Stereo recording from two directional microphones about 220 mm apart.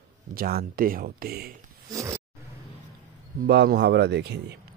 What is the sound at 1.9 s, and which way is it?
Roaring cats, 15° right (ahead or behind).